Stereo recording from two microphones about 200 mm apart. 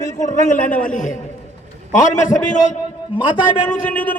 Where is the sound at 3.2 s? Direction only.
10° right (ahead or behind).